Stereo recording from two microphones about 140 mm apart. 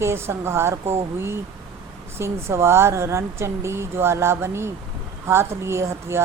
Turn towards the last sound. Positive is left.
turn(degrees=-20)  # may be behind; listen again after turning